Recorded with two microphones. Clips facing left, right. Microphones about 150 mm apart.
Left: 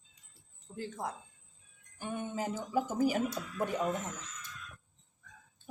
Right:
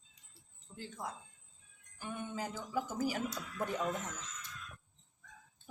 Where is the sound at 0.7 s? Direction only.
45° left (ahead or behind).